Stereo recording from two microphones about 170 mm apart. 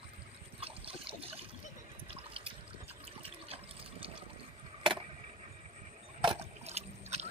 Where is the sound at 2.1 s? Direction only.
35° right (ahead or behind).